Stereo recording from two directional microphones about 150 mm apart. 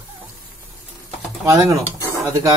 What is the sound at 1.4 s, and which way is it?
Speech, 20° right (ahead or behind).